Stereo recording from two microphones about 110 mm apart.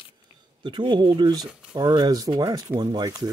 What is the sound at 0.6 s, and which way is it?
Speech, 45° right (ahead or behind).